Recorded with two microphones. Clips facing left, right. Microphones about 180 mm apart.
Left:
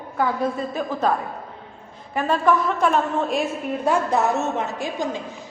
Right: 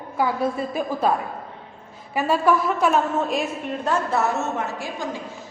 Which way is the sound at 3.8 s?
15° left (ahead or behind).